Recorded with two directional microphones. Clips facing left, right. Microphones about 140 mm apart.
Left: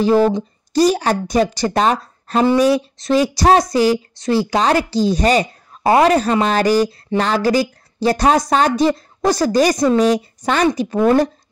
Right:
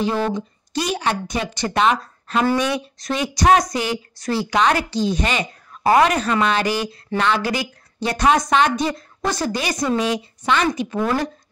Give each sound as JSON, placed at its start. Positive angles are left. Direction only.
{"t": 0.0, "sound": "speech", "side_deg": 35}